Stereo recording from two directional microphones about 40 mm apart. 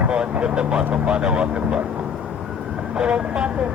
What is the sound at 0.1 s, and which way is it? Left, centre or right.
Speech, right.